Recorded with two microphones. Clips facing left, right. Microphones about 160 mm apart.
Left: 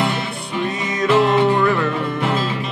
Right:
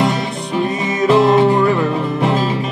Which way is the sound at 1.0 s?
35° right (ahead or behind).